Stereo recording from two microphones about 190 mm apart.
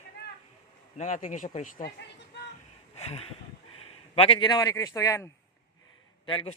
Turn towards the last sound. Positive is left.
turn(degrees=25)  # may be behind; listen again after turning